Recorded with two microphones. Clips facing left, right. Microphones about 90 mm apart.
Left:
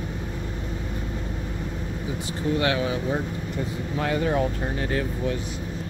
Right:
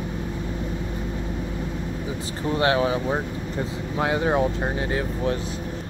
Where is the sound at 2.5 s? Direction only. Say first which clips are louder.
Right 5 dB; 35° right (ahead or behind).